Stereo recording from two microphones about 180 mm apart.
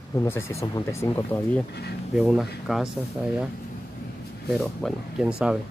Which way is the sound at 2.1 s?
Centre (ahead or behind).